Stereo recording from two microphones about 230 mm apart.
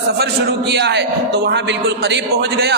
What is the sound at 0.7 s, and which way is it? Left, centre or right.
A man's voice, right.